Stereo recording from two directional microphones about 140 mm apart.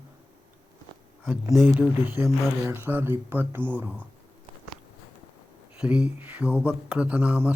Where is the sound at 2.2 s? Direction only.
15° right (ahead or behind).